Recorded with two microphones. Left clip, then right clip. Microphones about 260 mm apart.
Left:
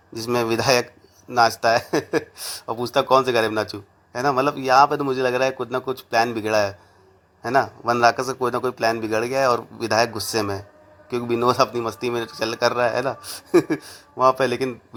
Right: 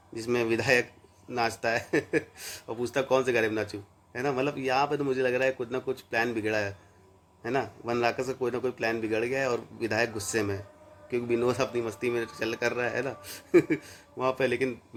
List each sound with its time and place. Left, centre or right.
0.1 s a man's voice: centre